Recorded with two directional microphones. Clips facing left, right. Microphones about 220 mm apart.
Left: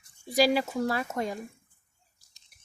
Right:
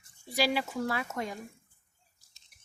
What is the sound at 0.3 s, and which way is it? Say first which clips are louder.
Speech: left 5 dB; 40° left (ahead or behind).